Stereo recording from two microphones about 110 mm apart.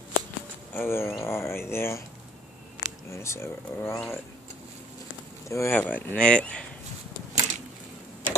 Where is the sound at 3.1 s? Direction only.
25° left (ahead or behind).